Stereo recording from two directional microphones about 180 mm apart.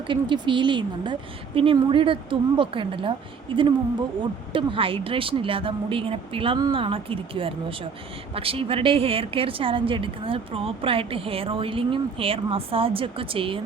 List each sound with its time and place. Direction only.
0.1 s a woman's voice: 25° right (ahead or behind)